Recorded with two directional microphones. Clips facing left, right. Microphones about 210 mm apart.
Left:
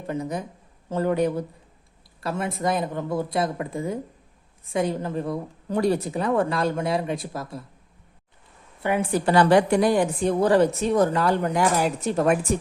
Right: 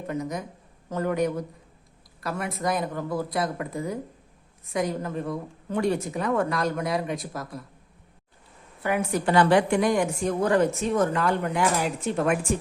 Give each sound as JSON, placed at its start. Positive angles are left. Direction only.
{"t": 0.1, "sound": "a woman's voice", "side_deg": 30}
{"t": 8.8, "sound": "a woman's voice", "side_deg": 30}